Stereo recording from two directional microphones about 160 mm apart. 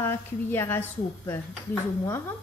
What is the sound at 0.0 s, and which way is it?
Speech, 15° left (ahead or behind).